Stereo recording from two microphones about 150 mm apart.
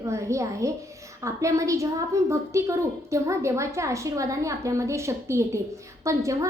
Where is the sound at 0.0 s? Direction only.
20° right (ahead or behind).